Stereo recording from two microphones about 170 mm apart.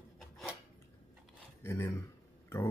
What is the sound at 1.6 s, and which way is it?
Speech, 15° left (ahead or behind).